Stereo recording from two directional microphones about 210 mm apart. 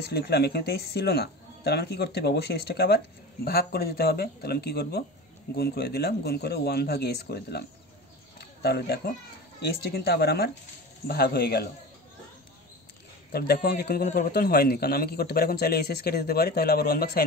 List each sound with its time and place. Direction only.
0.0 s a man's voice: 50° left (ahead or behind)
13.3 s a man's voice: 45° left (ahead or behind)